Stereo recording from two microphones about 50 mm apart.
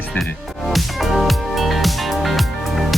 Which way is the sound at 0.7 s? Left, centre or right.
Centre.